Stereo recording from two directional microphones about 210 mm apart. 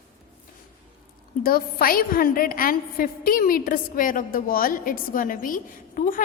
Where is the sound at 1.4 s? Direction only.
45° left (ahead or behind).